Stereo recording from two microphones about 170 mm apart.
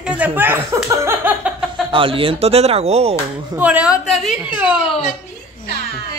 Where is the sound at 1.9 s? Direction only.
30° right (ahead or behind).